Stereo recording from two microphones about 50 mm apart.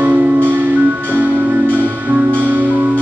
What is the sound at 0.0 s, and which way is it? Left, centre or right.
Music, right.